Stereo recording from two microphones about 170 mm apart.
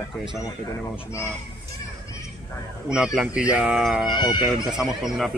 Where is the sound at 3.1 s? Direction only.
5° right (ahead or behind).